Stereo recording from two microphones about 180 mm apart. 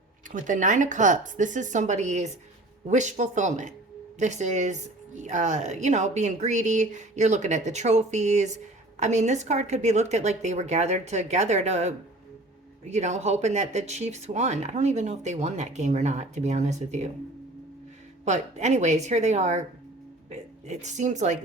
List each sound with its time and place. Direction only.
0.3 s speech: 45° right (ahead or behind)
18.3 s a woman's voice: 40° right (ahead or behind)